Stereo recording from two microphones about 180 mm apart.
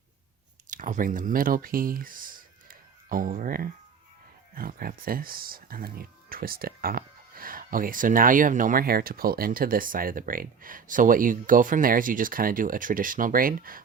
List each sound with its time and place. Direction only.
0.7 s speech: 45° right (ahead or behind)